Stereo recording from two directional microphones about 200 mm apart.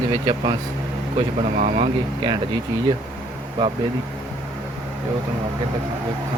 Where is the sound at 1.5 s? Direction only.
35° right (ahead or behind).